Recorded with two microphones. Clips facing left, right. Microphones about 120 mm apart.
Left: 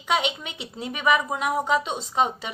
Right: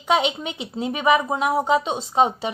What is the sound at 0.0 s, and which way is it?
Speech, 35° right (ahead or behind).